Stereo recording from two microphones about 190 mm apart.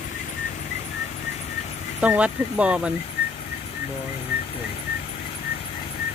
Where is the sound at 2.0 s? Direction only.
5° right (ahead or behind).